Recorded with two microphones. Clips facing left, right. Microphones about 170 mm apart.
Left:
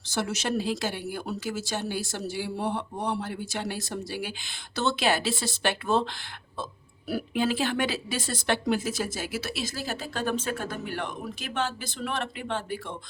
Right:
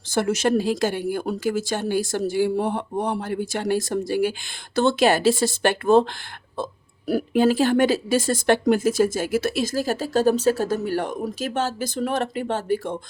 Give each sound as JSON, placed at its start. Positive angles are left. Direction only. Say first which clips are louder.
{"t": 0.1, "sound": "speech", "louder": "right 8 dB", "side_deg": -50}
{"t": 7.1, "sound": "speech", "louder": "right 8 dB", "side_deg": -45}